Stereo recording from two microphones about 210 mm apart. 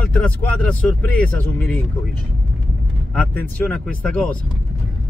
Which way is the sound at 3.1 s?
5° left (ahead or behind).